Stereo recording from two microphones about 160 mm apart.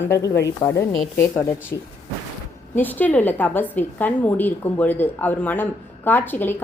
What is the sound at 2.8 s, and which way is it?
A woman's voice, 10° left (ahead or behind).